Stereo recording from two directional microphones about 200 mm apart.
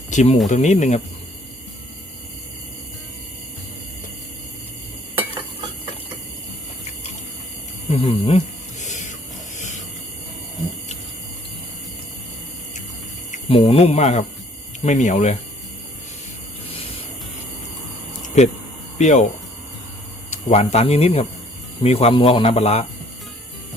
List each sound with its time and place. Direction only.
0.1 s speech: 35° left (ahead or behind)
7.9 s speech: 30° left (ahead or behind)
8.8 s a sound: 35° left (ahead or behind)
13.3 s cricket: 30° left (ahead or behind)
14.8 s speech: 35° left (ahead or behind)
18.3 s speech: 35° left (ahead or behind)
20.3 s speech: 30° left (ahead or behind)